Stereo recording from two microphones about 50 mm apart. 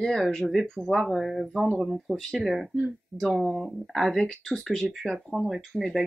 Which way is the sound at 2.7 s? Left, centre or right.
Centre.